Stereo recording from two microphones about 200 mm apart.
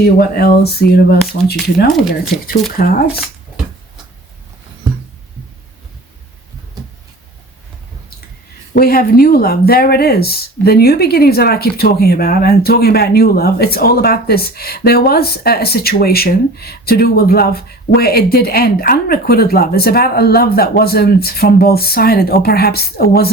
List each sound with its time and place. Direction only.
0.0 s speech: 50° left (ahead or behind)
2.8 s speech: 45° left (ahead or behind)
6.8 s a sound: 20° right (ahead or behind)
8.7 s speech: 50° left (ahead or behind)